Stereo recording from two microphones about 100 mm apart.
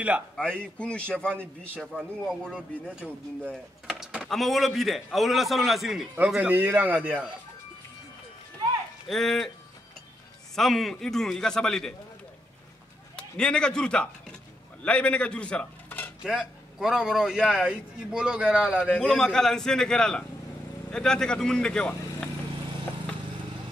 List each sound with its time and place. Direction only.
0.4 s speech: 10° left (ahead or behind)
1.8 s a man's voice: 5° right (ahead or behind)
4.2 s a man's voice: centre (ahead or behind); by 7.0 s 20° right (ahead or behind)
9.1 s a man's voice: 5° left (ahead or behind)
10.5 s a man's voice: centre (ahead or behind)
13.1 s a man's voice: 10° left (ahead or behind)
16.3 s a man's voice: 5° right (ahead or behind)
18.9 s a man's voice: 5° left (ahead or behind)